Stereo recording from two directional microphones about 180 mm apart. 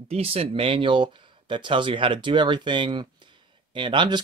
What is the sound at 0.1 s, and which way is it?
Speech, 35° right (ahead or behind).